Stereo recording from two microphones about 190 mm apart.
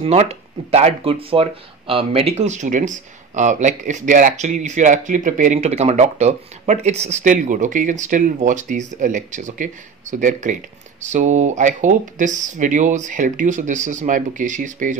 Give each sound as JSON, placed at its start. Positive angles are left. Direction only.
{"t": 0.0, "sound": "speech", "side_deg": -35}